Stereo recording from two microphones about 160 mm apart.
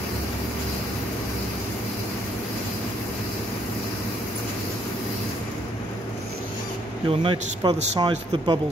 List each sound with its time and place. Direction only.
7.1 s speech: 35° right (ahead or behind)